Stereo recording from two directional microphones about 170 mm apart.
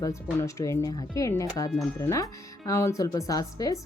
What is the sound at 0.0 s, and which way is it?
Speech, 15° left (ahead or behind).